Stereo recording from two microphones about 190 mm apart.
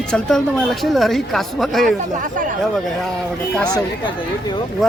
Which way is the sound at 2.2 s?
45° right (ahead or behind).